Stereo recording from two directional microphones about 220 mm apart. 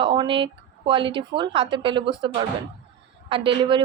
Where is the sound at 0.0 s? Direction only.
20° right (ahead or behind).